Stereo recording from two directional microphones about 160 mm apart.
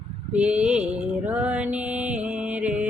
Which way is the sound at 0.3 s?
5° right (ahead or behind).